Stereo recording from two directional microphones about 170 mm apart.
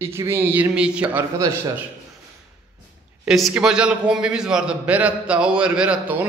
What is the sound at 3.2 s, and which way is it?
A man's voice, 5° right (ahead or behind).